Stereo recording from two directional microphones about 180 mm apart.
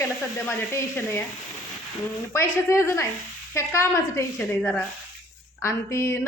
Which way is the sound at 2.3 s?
15° left (ahead or behind).